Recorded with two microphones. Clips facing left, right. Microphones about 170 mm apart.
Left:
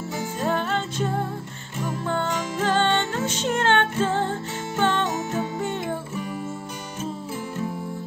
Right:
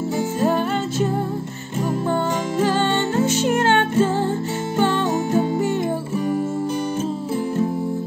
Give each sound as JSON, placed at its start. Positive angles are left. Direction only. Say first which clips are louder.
{"t": 0.4, "sound": "music", "louder": "right 4 dB", "side_deg": -10}
{"t": 2.6, "sound": "music", "louder": "right 2 dB", "side_deg": -10}
{"t": 5.1, "sound": "music", "louder": "right 7 dB", "side_deg": -30}